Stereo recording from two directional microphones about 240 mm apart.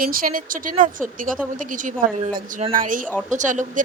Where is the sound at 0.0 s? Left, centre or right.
Right.